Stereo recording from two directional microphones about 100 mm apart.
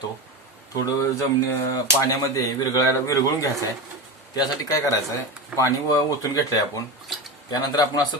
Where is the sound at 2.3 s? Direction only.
35° left (ahead or behind).